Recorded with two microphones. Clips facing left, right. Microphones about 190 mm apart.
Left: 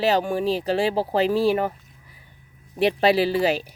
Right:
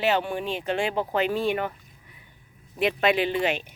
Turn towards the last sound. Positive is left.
turn(degrees=35)  # may be behind; listen again after turning